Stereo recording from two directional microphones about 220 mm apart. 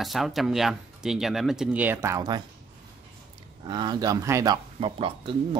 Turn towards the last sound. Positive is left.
turn(degrees=-25)  # may be behind; listen again after turning